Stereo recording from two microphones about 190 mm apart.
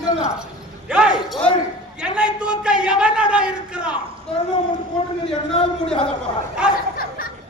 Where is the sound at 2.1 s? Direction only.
5° right (ahead or behind).